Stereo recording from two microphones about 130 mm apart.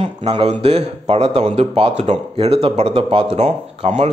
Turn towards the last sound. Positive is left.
turn(degrees=-60)  # may be behind; listen again after turning